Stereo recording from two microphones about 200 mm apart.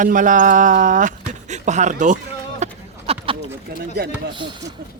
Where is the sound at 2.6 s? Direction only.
30° right (ahead or behind).